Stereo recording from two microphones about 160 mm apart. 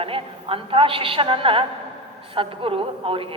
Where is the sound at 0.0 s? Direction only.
35° right (ahead or behind).